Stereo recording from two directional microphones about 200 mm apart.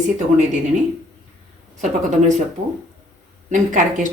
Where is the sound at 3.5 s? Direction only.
40° right (ahead or behind).